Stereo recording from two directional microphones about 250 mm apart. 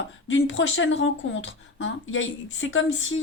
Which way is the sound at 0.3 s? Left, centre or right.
Left.